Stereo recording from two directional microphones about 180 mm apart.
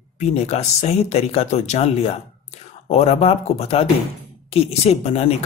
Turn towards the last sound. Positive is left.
turn(degrees=35)  # may be behind; listen again after turning